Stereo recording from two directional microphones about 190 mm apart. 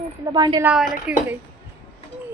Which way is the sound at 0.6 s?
5° right (ahead or behind).